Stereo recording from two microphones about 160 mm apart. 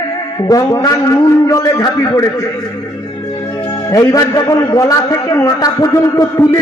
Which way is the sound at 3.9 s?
20° left (ahead or behind).